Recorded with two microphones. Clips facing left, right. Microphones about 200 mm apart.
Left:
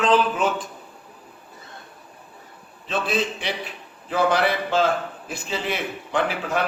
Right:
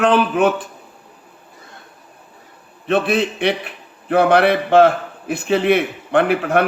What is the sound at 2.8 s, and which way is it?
A man's voice, 65° right (ahead or behind).